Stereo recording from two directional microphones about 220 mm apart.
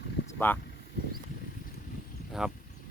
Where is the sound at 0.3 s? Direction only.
10° left (ahead or behind).